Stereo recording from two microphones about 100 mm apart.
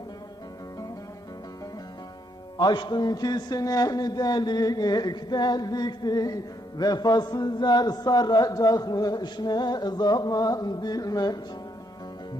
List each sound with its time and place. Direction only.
2.6 s a man's voice: 45° left (ahead or behind)